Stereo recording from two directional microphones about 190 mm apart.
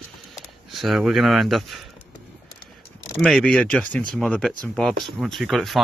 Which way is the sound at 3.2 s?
5° left (ahead or behind).